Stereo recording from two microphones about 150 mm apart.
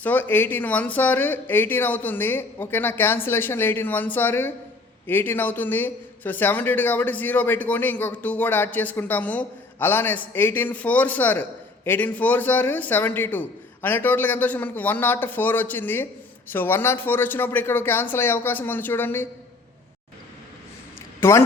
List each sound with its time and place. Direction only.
0.0 s a man's voice: 10° left (ahead or behind)
21.2 s speech: 15° left (ahead or behind)